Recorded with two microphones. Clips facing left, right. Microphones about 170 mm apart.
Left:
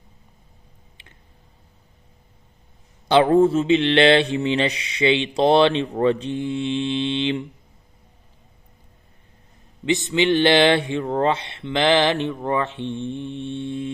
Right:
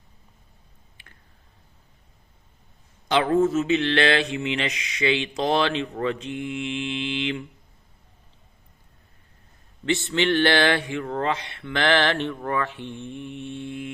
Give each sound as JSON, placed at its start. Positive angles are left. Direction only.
{"t": 1.0, "sound": "a sound", "side_deg": 25}
{"t": 3.1, "sound": "mantra", "side_deg": 30}
{"t": 9.8, "sound": "mantra", "side_deg": 15}